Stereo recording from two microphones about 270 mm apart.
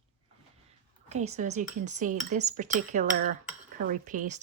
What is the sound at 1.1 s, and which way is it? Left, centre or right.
Speech, right.